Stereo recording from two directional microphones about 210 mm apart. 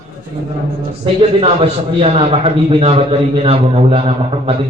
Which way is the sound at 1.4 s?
30° right (ahead or behind).